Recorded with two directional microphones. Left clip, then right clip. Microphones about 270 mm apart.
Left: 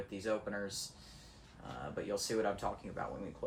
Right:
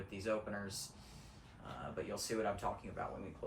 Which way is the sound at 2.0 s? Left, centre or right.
Left.